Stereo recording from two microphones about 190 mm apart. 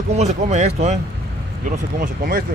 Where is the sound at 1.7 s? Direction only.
50° right (ahead or behind).